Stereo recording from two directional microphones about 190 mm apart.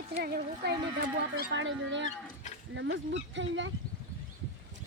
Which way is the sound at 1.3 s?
70° right (ahead or behind).